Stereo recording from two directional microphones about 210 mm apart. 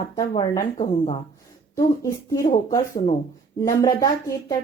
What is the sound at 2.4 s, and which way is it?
Speech, 40° left (ahead or behind).